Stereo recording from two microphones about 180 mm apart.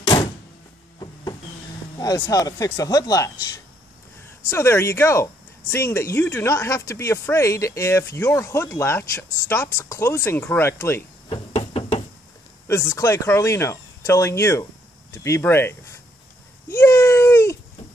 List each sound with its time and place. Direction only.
0.0 s door: 25° left (ahead or behind)
2.0 s speech: 15° left (ahead or behind)
4.5 s speech: 15° left (ahead or behind)
11.2 s knock: 30° left (ahead or behind)
12.6 s speech: 15° left (ahead or behind)
16.6 s baby cry: 15° left (ahead or behind)